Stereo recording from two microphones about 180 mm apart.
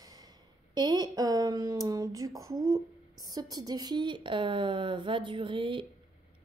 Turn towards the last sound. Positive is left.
turn(degrees=-30)  # may be behind; listen again after turning